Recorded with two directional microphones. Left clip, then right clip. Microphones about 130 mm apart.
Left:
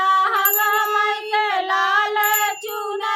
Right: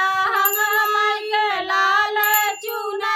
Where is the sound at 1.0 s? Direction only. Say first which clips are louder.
Even; 5° left (ahead or behind).